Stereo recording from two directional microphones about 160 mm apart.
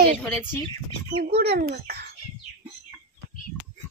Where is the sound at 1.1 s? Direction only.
90° right.